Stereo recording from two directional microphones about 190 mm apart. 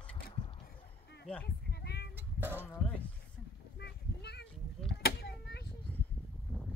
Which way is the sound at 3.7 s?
60° left (ahead or behind).